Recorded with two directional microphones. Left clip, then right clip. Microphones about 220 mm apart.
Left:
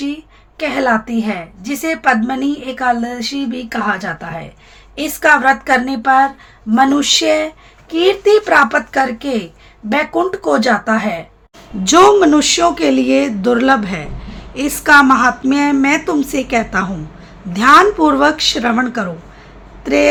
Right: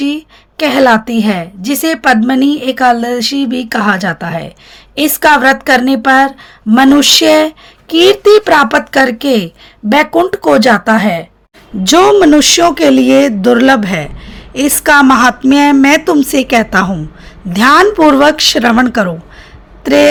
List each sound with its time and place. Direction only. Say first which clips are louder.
0.0 s a woman's voice: right 7 dB; 45° right (ahead or behind)
11.8 s speech: right 2 dB; 30° right (ahead or behind)
19.8 s a sound: right 6 dB; 40° right (ahead or behind)